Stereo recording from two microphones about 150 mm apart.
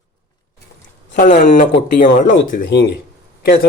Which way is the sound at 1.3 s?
60° left (ahead or behind).